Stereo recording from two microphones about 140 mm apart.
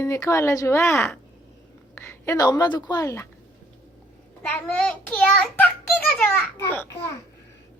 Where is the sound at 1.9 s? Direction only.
15° left (ahead or behind).